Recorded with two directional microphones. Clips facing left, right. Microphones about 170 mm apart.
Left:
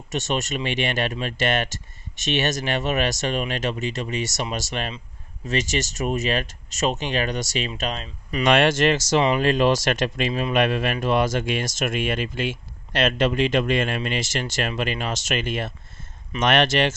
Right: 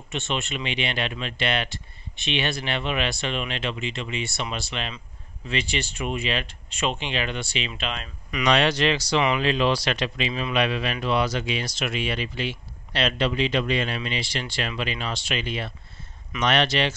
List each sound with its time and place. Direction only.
0.1 s speech: 40° left (ahead or behind)
8.5 s speech: 50° left (ahead or behind)